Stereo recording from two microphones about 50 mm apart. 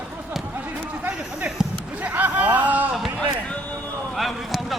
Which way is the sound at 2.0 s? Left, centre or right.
Right.